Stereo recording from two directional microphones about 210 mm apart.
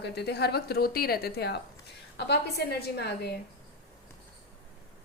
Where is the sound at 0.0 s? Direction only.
50° left (ahead or behind).